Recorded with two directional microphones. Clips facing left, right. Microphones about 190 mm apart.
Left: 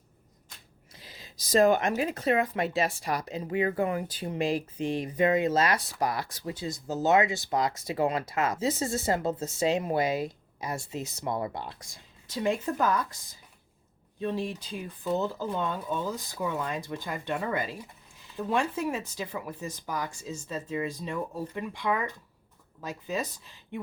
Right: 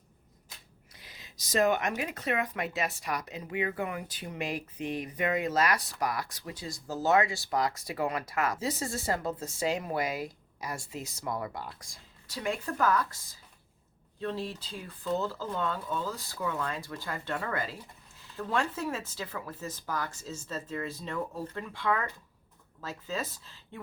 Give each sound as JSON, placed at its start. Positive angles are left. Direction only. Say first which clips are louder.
{"t": 0.9, "sound": "speech", "louder": "left 4 dB", "side_deg": 30}
{"t": 14.2, "sound": "speech", "louder": "left 3 dB", "side_deg": 15}